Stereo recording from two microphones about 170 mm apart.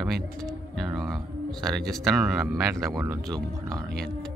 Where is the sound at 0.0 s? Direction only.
Centre (ahead or behind).